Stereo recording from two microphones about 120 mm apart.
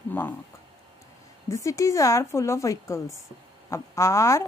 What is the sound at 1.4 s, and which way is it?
A woman's voice, 25° left (ahead or behind).